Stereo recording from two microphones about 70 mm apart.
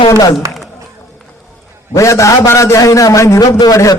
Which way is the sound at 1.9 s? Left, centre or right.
Left.